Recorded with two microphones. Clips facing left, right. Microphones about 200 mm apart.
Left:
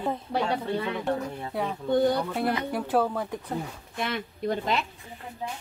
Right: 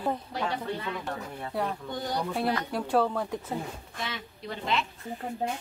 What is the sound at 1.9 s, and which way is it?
Speech, 55° left (ahead or behind).